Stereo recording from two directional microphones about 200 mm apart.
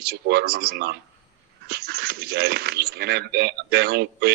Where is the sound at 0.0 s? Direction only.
50° right (ahead or behind).